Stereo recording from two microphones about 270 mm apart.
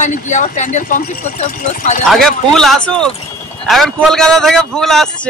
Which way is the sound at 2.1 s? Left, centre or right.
Centre.